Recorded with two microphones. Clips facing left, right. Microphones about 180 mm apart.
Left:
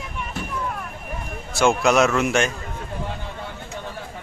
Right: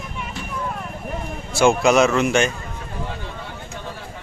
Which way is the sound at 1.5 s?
Centre (ahead or behind).